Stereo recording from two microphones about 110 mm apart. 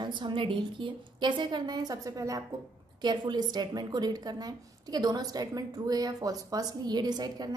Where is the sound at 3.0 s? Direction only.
40° right (ahead or behind).